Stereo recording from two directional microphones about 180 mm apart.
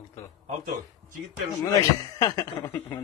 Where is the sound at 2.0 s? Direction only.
20° left (ahead or behind).